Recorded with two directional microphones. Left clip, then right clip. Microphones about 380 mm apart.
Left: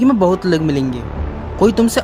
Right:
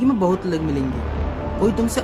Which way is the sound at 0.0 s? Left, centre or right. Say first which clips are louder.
Left 6 dB; centre.